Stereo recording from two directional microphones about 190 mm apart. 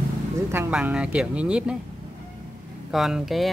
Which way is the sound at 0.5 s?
10° right (ahead or behind).